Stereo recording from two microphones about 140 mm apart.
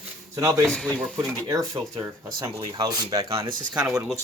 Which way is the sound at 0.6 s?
5° left (ahead or behind).